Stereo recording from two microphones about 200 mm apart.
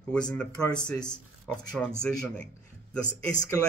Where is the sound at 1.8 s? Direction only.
Centre (ahead or behind).